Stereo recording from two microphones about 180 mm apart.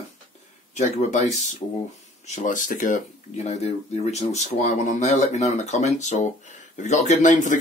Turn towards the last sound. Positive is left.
turn(degrees=45)  # may be behind; listen again after turning